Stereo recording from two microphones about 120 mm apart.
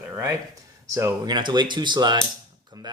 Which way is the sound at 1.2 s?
35° right (ahead or behind).